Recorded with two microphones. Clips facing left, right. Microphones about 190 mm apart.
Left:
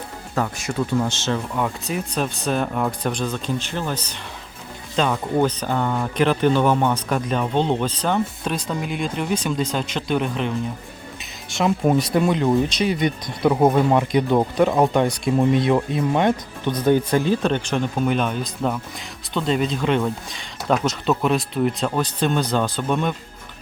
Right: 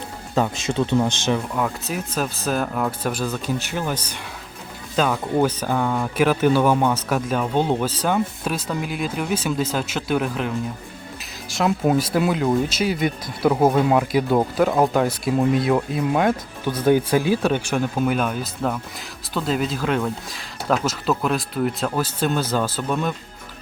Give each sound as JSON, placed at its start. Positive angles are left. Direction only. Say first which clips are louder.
{"t": 0.3, "sound": "speech", "louder": "right 2 dB", "side_deg": -20}
{"t": 1.5, "sound": "speech", "louder": "even", "side_deg": 0}